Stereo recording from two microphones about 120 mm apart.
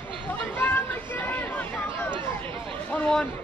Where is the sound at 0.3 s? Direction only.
15° left (ahead or behind).